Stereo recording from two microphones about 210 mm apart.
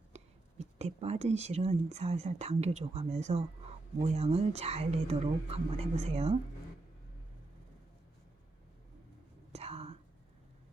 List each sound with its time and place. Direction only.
0.1 s a sound: 30° right (ahead or behind)
0.6 s speech: 30° right (ahead or behind)
9.5 s whispering: 30° right (ahead or behind)